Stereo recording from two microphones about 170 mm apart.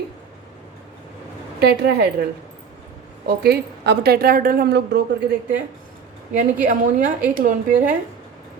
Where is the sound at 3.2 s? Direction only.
70° right (ahead or behind).